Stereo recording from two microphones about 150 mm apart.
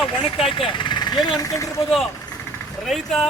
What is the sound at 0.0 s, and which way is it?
Speech, centre (ahead or behind).